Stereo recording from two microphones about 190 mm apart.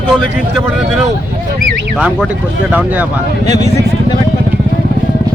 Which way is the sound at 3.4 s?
20° left (ahead or behind).